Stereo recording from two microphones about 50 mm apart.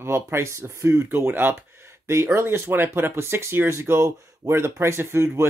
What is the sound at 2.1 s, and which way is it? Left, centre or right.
Speech, right.